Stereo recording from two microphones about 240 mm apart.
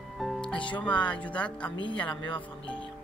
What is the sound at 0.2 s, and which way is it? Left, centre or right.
Music, centre.